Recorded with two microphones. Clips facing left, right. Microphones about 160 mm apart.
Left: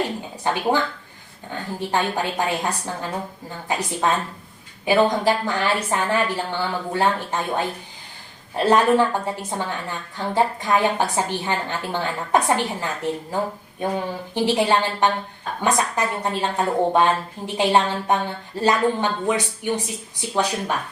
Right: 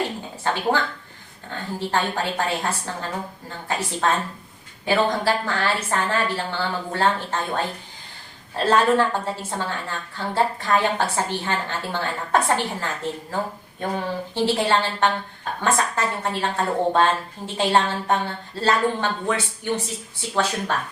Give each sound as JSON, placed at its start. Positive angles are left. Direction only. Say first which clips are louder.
{"t": 0.4, "sound": "a woman's voice", "louder": "left 1 dB", "side_deg": 15}